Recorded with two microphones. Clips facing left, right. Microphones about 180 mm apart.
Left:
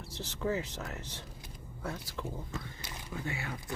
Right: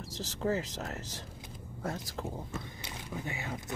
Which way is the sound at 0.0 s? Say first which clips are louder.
Right 2 dB; 40° right (ahead or behind).